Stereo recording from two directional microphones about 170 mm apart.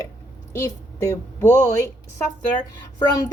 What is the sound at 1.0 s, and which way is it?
Speech, 15° left (ahead or behind).